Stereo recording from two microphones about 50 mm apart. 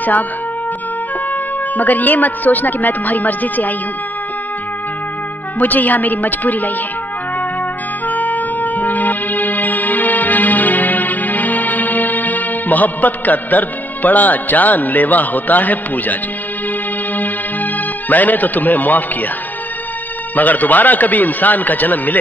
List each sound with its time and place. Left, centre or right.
1.3 s speech: left
5.6 s speech: left
8.1 s music: left
18.1 s speech: left
20.3 s speech: left